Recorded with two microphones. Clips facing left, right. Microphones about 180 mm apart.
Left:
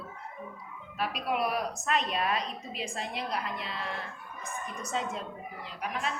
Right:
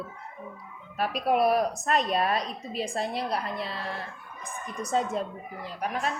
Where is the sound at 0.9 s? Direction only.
45° right (ahead or behind).